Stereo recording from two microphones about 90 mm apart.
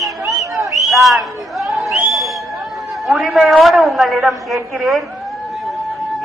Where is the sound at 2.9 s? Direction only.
Centre (ahead or behind).